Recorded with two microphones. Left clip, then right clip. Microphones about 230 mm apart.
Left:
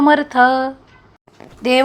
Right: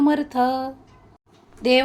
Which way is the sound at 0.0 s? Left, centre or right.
Centre.